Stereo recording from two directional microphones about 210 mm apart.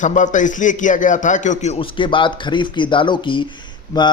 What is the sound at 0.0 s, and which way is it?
A man's voice, 35° left (ahead or behind).